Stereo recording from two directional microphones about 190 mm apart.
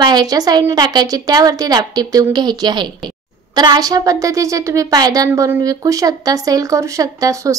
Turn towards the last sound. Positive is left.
turn(degrees=-15)  # may be behind; listen again after turning